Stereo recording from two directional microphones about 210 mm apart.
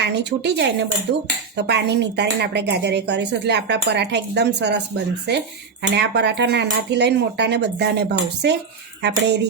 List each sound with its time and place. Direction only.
0.0 s speech: 55° right (ahead or behind)